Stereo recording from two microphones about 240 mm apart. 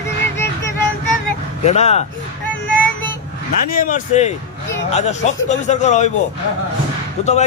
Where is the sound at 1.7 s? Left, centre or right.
Left.